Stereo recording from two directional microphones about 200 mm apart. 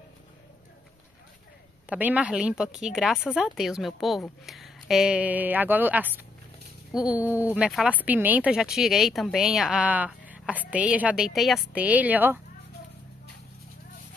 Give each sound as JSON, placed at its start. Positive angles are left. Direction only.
{"t": 1.9, "sound": "a woman's voice", "side_deg": -5}